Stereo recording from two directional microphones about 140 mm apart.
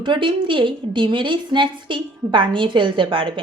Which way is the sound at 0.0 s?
35° right (ahead or behind).